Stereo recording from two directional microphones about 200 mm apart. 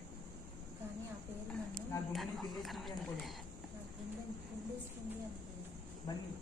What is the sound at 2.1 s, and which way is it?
Speech, centre (ahead or behind).